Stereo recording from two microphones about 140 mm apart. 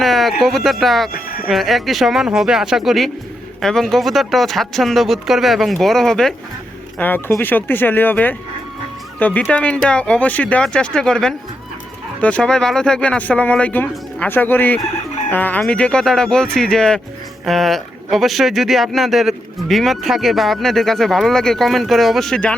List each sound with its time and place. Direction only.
0.0 s speech: centre (ahead or behind)
1.1 s music: 90° left
1.5 s speech: centre (ahead or behind)
7.0 s speech: 15° left (ahead or behind)